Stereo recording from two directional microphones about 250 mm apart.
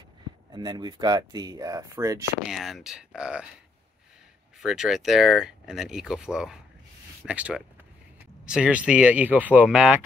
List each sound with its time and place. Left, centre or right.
0.5 s speech: centre
2.4 s speech: centre
4.6 s speech: centre